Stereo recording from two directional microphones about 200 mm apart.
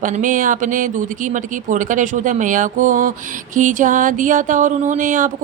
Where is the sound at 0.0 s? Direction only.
40° right (ahead or behind).